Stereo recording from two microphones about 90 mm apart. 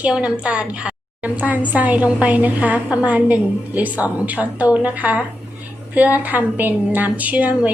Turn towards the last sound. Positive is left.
turn(degrees=-15)  # may be behind; listen again after turning